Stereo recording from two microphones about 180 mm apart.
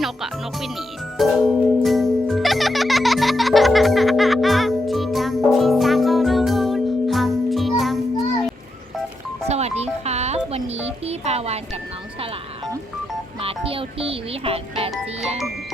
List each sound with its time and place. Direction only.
0.0 s speech: centre (ahead or behind)
1.2 s music: centre (ahead or behind)
9.5 s music: 35° right (ahead or behind)
13.4 s music: 30° right (ahead or behind)